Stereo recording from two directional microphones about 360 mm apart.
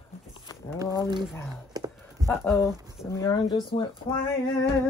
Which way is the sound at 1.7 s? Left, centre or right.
Centre.